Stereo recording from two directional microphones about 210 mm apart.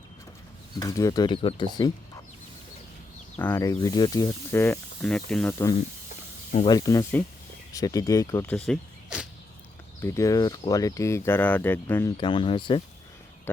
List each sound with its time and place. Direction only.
0.8 s speech: 15° left (ahead or behind)
3.3 s speech: 10° left (ahead or behind)
10.0 s speech: 15° left (ahead or behind)